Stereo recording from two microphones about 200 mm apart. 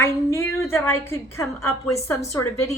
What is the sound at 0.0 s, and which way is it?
A woman's voice, 10° left (ahead or behind).